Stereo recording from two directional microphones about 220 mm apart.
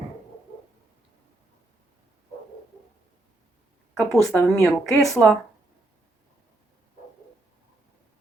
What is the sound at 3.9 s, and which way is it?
Speech, centre (ahead or behind).